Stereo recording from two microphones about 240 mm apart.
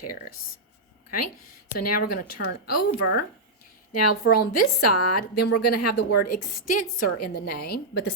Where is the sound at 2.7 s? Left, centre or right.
Left.